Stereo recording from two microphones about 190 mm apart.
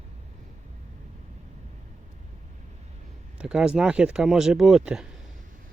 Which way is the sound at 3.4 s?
5° right (ahead or behind).